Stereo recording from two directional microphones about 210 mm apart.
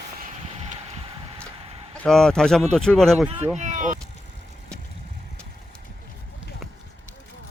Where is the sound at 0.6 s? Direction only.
30° right (ahead or behind).